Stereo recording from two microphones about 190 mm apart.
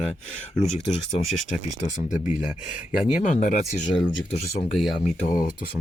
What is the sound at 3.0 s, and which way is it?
Speech, 40° left (ahead or behind).